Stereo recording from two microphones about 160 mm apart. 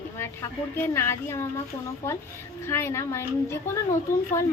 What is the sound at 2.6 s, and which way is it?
Speech, 15° left (ahead or behind).